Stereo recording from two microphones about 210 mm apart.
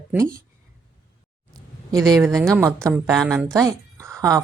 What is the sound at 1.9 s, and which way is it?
Speech, 15° right (ahead or behind).